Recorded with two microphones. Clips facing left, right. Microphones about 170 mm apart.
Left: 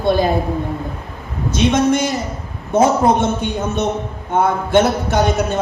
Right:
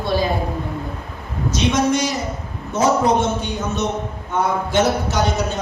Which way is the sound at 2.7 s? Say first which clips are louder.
Left 3 dB; 55° left (ahead or behind).